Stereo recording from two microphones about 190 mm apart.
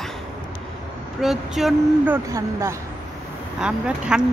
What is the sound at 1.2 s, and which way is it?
Speech, centre (ahead or behind).